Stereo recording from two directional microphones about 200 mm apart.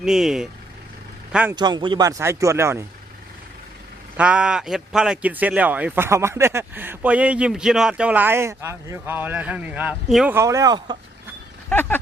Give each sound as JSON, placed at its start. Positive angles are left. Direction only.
{"t": 0.0, "sound": "a man's voice", "side_deg": 0}
{"t": 1.5, "sound": "a man's voice", "side_deg": -20}
{"t": 4.2, "sound": "a man's voice", "side_deg": -5}
{"t": 10.3, "sound": "a man's voice", "side_deg": -15}
{"t": 11.7, "sound": "speech", "side_deg": 10}